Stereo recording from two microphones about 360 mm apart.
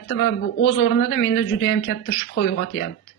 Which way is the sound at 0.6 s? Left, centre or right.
Left.